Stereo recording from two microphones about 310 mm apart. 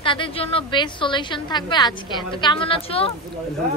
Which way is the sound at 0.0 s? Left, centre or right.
Centre.